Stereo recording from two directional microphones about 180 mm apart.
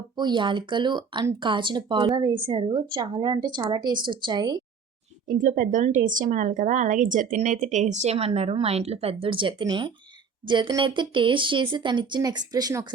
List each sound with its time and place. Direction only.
0.2 s speech: 25° right (ahead or behind)
5.3 s speech: 45° right (ahead or behind); by 12.9 s 20° right (ahead or behind)